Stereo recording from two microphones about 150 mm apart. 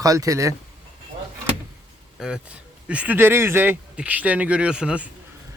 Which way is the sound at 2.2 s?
5° right (ahead or behind).